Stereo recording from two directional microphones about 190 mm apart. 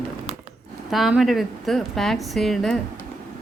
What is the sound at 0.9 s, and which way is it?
A woman's voice, centre (ahead or behind).